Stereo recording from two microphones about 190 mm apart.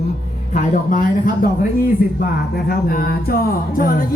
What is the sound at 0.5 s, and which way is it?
Speech, 45° left (ahead or behind).